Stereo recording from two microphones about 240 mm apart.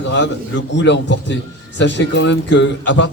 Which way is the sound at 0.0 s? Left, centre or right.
Left.